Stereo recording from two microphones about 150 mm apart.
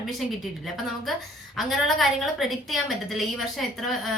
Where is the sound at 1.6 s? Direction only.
Centre (ahead or behind).